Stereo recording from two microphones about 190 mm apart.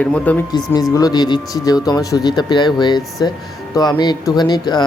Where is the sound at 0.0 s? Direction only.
10° left (ahead or behind).